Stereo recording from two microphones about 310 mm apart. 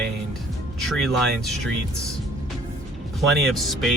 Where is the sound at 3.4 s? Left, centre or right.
Centre.